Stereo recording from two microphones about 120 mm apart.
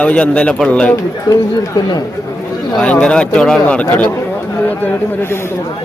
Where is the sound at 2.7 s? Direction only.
10° left (ahead or behind).